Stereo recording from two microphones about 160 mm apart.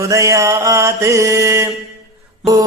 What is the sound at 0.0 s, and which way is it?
Mantra, 20° right (ahead or behind).